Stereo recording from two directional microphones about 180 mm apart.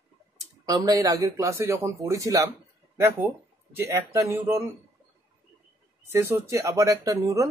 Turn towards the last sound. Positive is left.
turn(degrees=-20)  # may be behind; listen again after turning